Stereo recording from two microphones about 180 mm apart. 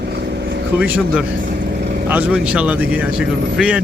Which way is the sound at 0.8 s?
5° right (ahead or behind).